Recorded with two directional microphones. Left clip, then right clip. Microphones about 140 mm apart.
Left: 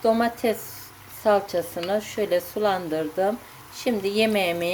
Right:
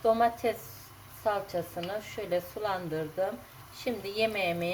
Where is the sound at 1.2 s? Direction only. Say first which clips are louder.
Left 9 dB; 60° left (ahead or behind).